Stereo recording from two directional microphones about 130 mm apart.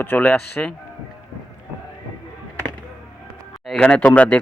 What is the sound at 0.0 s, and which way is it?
Speech, 10° left (ahead or behind).